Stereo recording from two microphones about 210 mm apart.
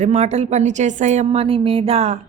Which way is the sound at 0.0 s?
30° right (ahead or behind).